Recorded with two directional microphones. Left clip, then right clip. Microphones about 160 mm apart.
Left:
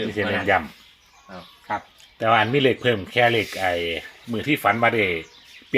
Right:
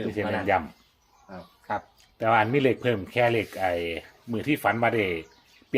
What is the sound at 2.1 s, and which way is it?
Speech, 40° left (ahead or behind).